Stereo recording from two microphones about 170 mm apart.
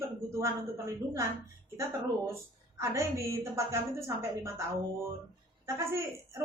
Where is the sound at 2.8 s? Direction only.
15° right (ahead or behind).